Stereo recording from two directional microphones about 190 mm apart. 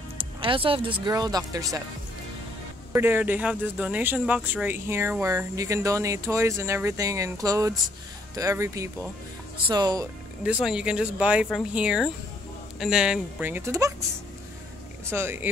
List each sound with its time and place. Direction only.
0.2 s speech: 30° right (ahead or behind)
2.9 s speech: 10° right (ahead or behind)
10.4 s speech: 5° right (ahead or behind)
15.0 s speech: 10° right (ahead or behind)